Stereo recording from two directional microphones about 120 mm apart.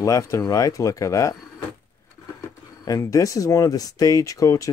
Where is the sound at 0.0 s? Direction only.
25° left (ahead or behind).